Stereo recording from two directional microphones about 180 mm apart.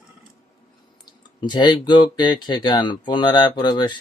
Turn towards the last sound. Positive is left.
turn(degrees=25)  # may be behind; listen again after turning